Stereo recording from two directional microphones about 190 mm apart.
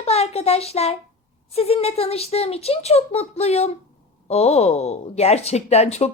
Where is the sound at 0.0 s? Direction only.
35° left (ahead or behind).